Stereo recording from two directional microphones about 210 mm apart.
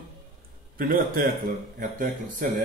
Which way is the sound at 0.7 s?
45° right (ahead or behind).